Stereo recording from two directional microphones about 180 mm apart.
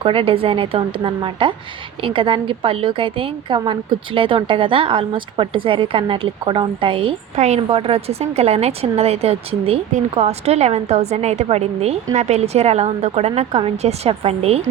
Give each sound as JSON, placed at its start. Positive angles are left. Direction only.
{"t": 0.0, "sound": "a woman's voice", "side_deg": -30}